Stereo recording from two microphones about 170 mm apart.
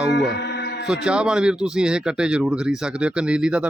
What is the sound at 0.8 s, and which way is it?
Speech, 5° right (ahead or behind).